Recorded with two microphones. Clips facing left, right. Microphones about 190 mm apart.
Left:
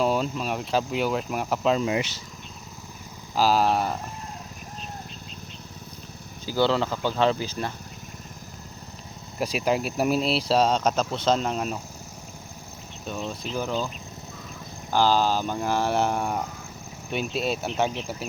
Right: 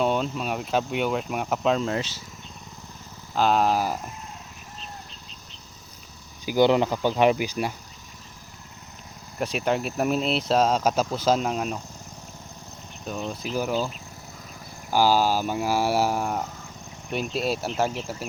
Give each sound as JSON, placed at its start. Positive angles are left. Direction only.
{"t": 0.0, "sound": "speech", "side_deg": 0}
{"t": 3.3, "sound": "speech", "side_deg": 5}
{"t": 6.4, "sound": "speech", "side_deg": -15}
{"t": 9.4, "sound": "speech", "side_deg": 5}
{"t": 13.1, "sound": "speech", "side_deg": -5}